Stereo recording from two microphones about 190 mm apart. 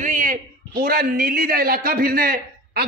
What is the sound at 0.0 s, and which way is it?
A man's voice, 45° right (ahead or behind).